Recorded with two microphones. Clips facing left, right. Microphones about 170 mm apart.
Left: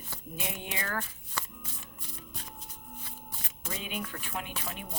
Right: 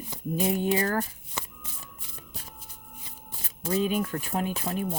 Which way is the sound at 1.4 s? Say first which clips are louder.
Right 1 dB; 20° right (ahead or behind).